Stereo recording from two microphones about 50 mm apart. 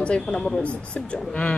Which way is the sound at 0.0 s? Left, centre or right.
Left.